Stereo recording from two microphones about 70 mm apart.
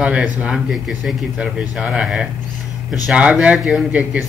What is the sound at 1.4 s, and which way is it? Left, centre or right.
Speech, centre.